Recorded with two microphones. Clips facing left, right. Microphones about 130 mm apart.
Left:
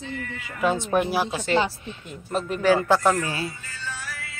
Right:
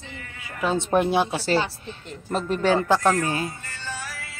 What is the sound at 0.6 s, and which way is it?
Speech, 25° right (ahead or behind).